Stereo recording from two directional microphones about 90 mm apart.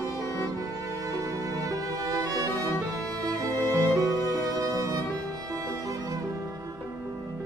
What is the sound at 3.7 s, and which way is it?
Music, 40° right (ahead or behind).